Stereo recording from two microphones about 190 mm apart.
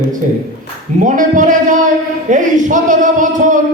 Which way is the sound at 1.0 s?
45° right (ahead or behind).